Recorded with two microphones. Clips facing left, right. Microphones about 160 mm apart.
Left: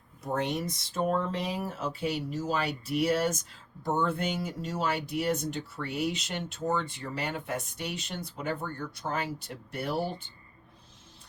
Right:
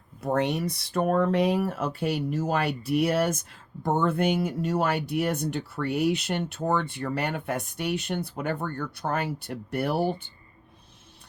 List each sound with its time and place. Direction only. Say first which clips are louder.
0.2 s speech: right 5 dB; 65° right (ahead or behind)